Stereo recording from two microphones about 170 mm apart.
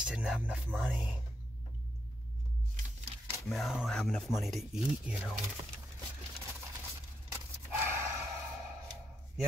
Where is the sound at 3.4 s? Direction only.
Centre (ahead or behind).